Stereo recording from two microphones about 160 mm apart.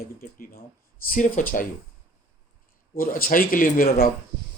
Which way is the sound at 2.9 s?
60° left (ahead or behind).